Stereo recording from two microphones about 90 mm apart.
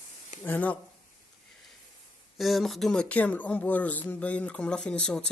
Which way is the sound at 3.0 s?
15° left (ahead or behind).